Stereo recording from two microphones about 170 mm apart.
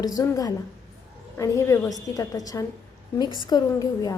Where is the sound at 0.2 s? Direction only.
20° left (ahead or behind).